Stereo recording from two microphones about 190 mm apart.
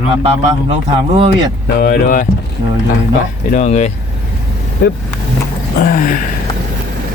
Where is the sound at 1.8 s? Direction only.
50° left (ahead or behind).